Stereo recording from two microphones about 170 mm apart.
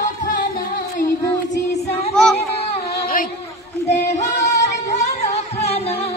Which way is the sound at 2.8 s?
60° left (ahead or behind).